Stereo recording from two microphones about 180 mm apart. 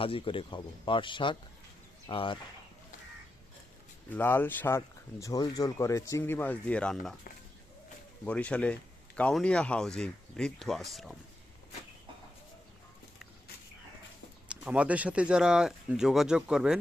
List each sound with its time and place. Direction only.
0.0 s speech: 30° left (ahead or behind)
4.1 s speech: 10° left (ahead or behind)
8.2 s speech: 5° left (ahead or behind)
14.4 s speech: 5° right (ahead or behind)